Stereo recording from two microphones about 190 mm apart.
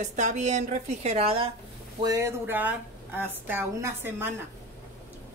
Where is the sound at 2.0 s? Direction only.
15° right (ahead or behind).